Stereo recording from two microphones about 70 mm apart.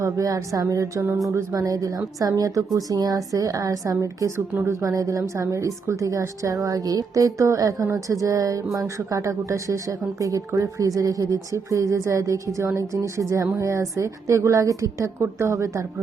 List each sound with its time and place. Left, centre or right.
0.0 s a woman's voice: right